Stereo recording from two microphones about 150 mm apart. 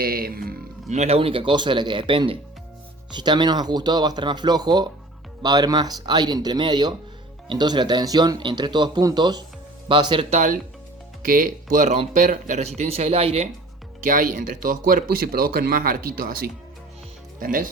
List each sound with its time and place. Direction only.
0.0 s speech: 80° right
0.9 s speech: 45° right (ahead or behind)
10.3 s speech: 55° right (ahead or behind)
11.2 s speech: 65° right (ahead or behind); by 13.5 s 45° right (ahead or behind)
14.0 s speech: 65° right (ahead or behind); by 16.5 s 80° right
17.4 s speech: 70° right (ahead or behind)